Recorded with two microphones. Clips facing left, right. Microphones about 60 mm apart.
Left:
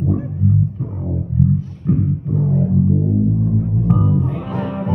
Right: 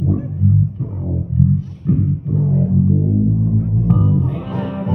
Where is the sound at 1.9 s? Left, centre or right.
Left.